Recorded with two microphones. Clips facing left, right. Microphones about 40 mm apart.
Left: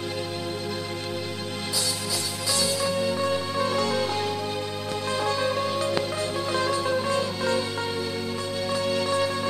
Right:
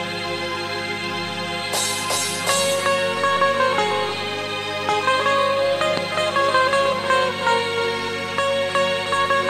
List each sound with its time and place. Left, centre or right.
2.4 s music: right
5.0 s music: right